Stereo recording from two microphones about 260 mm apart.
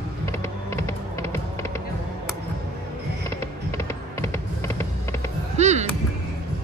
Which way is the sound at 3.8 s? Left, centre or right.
Centre.